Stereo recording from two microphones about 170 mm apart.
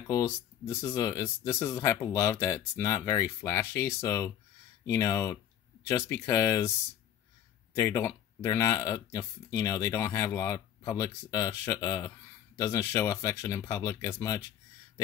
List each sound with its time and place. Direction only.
0.1 s speech: 15° left (ahead or behind)
7.7 s speech: 15° left (ahead or behind)